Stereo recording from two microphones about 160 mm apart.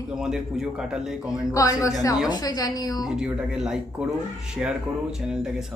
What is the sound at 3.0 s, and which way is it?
Speech, 5° right (ahead or behind).